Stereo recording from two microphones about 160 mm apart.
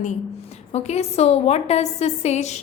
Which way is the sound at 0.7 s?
40° left (ahead or behind).